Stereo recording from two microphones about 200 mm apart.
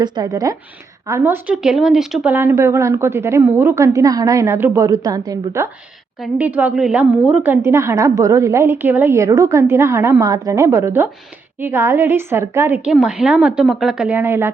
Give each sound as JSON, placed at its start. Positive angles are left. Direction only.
{"t": 0.0, "sound": "a woman's voice", "side_deg": -20}